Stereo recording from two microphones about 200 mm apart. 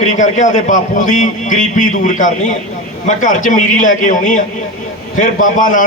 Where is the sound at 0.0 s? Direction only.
40° left (ahead or behind).